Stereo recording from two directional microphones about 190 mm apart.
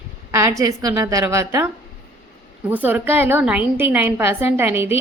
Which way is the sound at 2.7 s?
10° right (ahead or behind).